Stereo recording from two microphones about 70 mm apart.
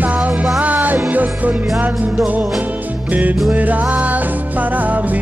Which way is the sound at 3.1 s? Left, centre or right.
Right.